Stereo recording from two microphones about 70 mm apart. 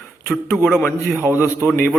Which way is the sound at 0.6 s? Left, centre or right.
Centre.